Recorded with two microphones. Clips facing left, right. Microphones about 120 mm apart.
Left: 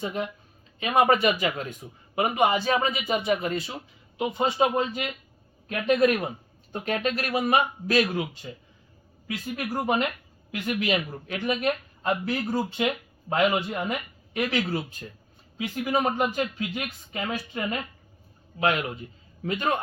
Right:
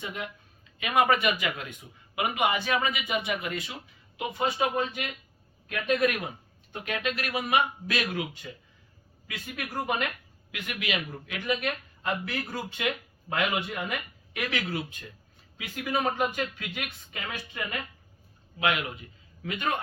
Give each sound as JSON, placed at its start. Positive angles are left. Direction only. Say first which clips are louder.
{"t": 0.0, "sound": "speech", "louder": "left 6 dB", "side_deg": 35}